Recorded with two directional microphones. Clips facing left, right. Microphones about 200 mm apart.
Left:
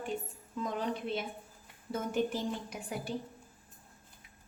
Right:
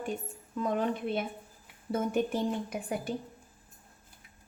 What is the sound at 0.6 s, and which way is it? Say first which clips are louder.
A woman's voice: right 5 dB; 55° right (ahead or behind).